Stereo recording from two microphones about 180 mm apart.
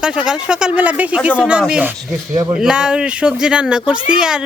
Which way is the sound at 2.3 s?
20° right (ahead or behind).